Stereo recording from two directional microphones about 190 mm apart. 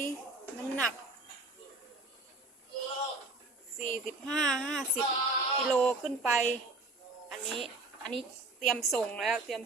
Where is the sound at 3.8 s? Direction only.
45° left (ahead or behind).